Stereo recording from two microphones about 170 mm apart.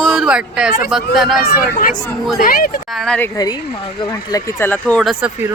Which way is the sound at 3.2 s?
15° left (ahead or behind).